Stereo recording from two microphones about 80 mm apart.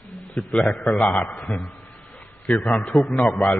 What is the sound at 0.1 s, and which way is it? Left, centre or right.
A man's voice, centre.